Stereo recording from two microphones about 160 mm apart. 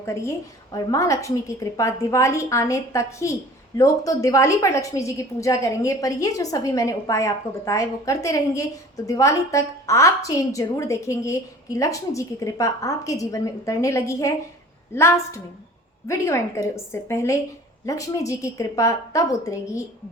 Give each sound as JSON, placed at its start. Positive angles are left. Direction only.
{"t": 0.0, "sound": "a woman's voice", "side_deg": 15}